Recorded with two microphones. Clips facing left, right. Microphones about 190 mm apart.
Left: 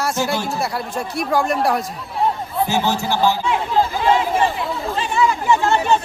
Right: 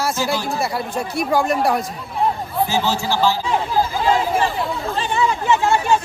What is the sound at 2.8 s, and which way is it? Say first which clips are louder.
Speech: left 1 dB; 20° left (ahead or behind).